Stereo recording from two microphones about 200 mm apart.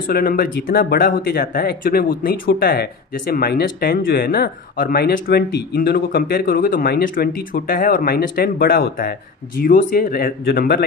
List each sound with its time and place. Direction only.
0.0 s speech: 45° left (ahead or behind)